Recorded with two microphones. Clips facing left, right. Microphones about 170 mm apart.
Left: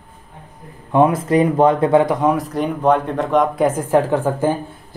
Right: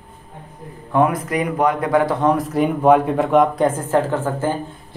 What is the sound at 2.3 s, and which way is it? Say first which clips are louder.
Speech: right 1 dB; centre (ahead or behind).